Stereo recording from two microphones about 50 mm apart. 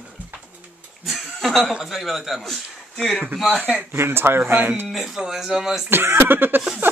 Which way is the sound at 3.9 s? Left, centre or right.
Right.